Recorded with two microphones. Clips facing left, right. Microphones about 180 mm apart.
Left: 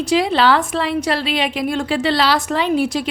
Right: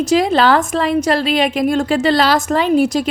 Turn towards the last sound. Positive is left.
turn(degrees=-45)  # may be behind; listen again after turning